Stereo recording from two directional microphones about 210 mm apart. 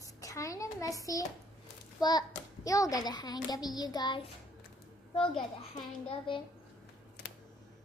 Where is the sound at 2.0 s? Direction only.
20° left (ahead or behind).